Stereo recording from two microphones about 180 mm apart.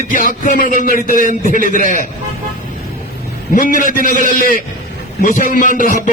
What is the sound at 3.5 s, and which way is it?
A man's voice, 50° left (ahead or behind).